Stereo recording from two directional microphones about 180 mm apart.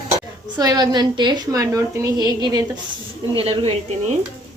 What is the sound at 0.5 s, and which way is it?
A woman's voice, 20° right (ahead or behind).